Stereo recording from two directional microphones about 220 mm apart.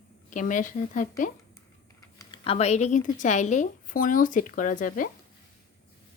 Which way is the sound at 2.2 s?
20° left (ahead or behind).